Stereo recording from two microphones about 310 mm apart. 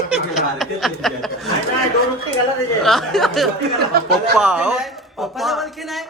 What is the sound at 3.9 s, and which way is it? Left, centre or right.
Speech, right.